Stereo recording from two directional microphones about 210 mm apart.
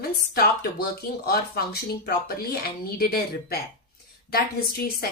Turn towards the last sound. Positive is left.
turn(degrees=45)  # may be behind; listen again after turning